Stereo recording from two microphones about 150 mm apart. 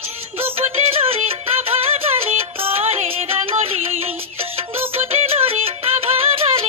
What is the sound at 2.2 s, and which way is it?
Music, 40° right (ahead or behind).